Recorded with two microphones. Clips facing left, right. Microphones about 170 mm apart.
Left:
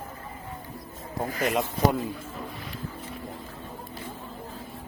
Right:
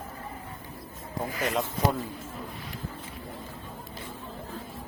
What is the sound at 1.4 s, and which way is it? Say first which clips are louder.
Speech: left 3 dB; 20° left (ahead or behind).